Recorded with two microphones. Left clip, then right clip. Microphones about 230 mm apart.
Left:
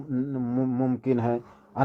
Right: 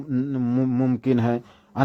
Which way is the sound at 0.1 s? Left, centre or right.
Right.